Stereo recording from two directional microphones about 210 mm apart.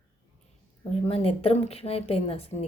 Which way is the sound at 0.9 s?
25° left (ahead or behind).